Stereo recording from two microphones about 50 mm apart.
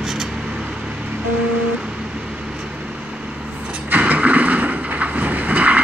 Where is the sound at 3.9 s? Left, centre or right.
Right.